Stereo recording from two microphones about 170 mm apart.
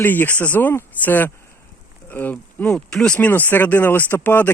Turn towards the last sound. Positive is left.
turn(degrees=10)  # may be behind; listen again after turning